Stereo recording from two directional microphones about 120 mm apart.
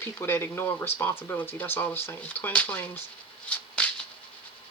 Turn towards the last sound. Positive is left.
turn(degrees=10)  # may be behind; listen again after turning